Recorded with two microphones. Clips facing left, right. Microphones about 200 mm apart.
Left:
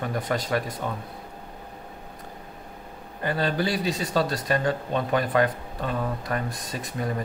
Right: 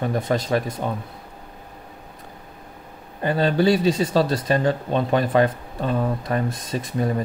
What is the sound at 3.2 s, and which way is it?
Speech, 25° right (ahead or behind).